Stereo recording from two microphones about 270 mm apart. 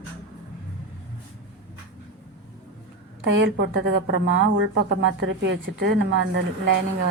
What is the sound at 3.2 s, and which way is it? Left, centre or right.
A woman's voice, right.